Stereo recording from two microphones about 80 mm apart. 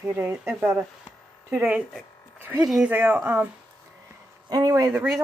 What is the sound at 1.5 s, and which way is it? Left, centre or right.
Speech, centre.